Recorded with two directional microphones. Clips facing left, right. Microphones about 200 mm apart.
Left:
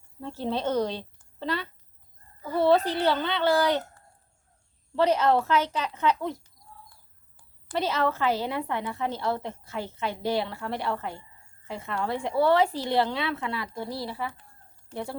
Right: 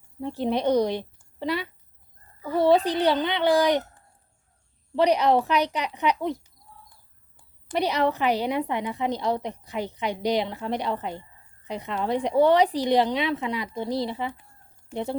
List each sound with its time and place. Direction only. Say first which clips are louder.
0.2 s a woman's voice: right 4 dB; 15° right (ahead or behind)